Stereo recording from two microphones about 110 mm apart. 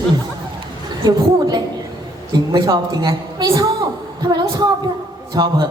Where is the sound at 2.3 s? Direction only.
35° right (ahead or behind).